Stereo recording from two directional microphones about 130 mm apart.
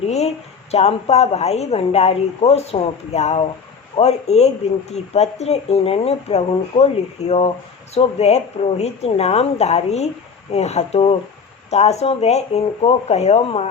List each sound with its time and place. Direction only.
0.1 s a woman's voice: 55° left (ahead or behind)